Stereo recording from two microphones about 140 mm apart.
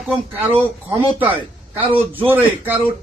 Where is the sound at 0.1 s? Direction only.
15° right (ahead or behind).